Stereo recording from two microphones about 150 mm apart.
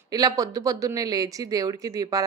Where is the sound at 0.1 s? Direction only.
25° right (ahead or behind).